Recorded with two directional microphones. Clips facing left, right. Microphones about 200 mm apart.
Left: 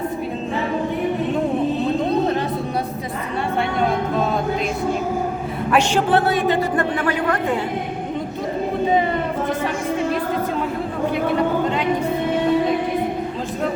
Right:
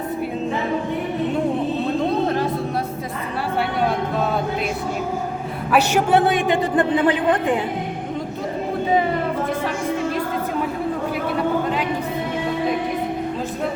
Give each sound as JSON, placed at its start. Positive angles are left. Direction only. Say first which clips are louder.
{"t": 5.7, "sound": "a man's voice", "louder": "right 1 dB", "side_deg": -10}